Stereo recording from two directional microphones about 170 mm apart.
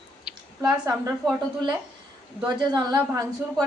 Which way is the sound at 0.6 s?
20° right (ahead or behind).